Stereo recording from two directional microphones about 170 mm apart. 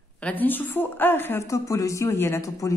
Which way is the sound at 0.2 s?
10° left (ahead or behind).